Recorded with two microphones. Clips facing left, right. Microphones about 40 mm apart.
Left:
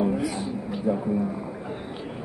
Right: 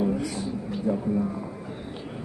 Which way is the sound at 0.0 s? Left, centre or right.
Centre.